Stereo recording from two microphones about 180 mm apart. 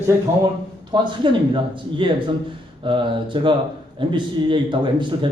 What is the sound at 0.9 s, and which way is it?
A man's voice, 25° right (ahead or behind).